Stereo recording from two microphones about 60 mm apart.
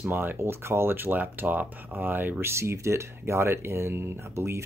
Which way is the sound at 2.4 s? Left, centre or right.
Right.